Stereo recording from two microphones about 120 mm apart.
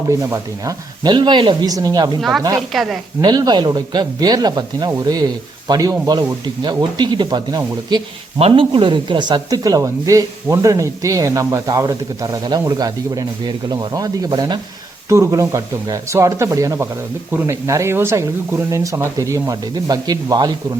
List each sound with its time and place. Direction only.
0.1 s speech: 25° right (ahead or behind)
2.6 s speech: centre (ahead or behind)
3.2 s speech: 35° right (ahead or behind)
8.4 s speech: 50° right (ahead or behind); by 20.5 s 35° right (ahead or behind)